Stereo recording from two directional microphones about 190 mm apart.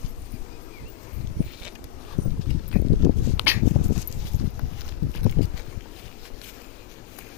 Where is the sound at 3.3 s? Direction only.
10° right (ahead or behind).